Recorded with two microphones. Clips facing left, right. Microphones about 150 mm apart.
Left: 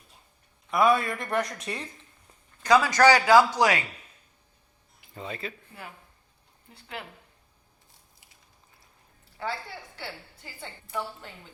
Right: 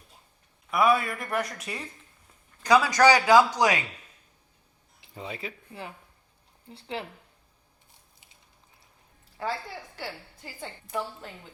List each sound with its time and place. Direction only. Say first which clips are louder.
0.7 s a man's voice: left 1 dB; 5° right (ahead or behind)
5.1 s a man's voice: left 1 dB; 10° right (ahead or behind)
6.7 s speech: right 5 dB; 30° right (ahead or behind)
10.0 s a woman's voice: right 2 dB; 45° right (ahead or behind)